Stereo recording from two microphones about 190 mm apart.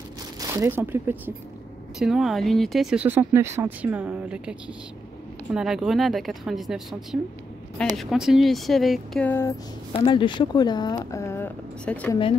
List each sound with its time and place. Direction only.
0.4 s speech: 15° right (ahead or behind); by 9.6 s 15° left (ahead or behind)
9.9 s speech: 25° left (ahead or behind); by 12.2 s 5° left (ahead or behind)